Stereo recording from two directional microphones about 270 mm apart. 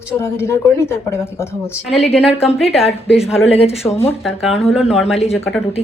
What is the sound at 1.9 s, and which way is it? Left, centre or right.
Speech, left.